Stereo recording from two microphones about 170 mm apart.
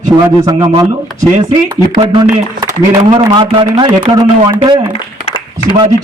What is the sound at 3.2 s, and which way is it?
A man's voice, 30° right (ahead or behind).